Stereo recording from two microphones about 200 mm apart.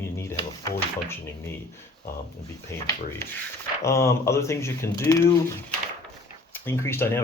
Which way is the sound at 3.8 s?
15° left (ahead or behind).